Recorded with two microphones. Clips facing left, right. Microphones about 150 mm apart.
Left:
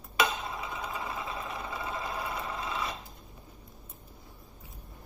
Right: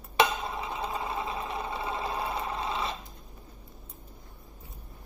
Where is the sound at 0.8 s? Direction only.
30° right (ahead or behind).